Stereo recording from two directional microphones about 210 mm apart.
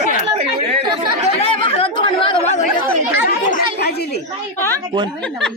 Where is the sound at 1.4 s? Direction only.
25° left (ahead or behind).